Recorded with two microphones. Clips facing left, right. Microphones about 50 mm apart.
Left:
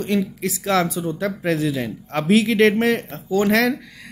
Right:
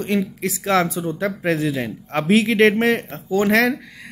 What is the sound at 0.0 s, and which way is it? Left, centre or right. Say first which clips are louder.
Speech: even; right.